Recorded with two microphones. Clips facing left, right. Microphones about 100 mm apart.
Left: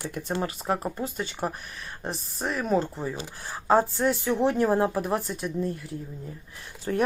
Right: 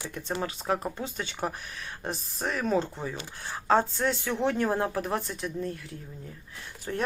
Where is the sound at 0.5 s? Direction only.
Centre (ahead or behind).